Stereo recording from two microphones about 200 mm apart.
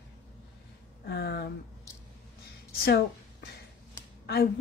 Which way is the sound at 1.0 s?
55° left (ahead or behind).